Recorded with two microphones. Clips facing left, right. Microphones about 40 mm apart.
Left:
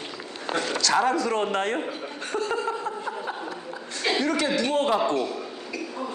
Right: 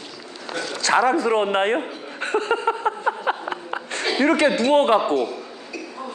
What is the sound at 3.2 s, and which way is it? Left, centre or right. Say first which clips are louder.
Chuckle: right 7 dB; right.